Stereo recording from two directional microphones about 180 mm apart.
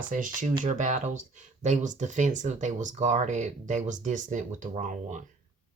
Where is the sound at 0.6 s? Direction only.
45° right (ahead or behind).